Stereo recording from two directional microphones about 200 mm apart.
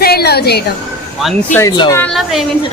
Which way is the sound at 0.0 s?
50° left (ahead or behind).